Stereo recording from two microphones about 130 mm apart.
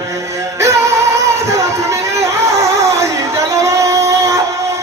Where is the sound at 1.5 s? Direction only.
25° right (ahead or behind).